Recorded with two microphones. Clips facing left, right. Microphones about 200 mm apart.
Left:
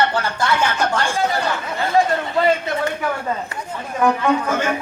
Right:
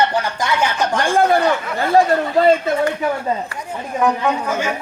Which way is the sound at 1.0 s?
55° right (ahead or behind).